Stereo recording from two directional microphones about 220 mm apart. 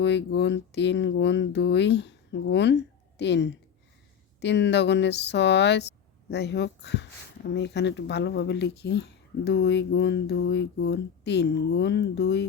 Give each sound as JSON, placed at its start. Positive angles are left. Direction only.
{"t": 0.0, "sound": "speech", "side_deg": 50}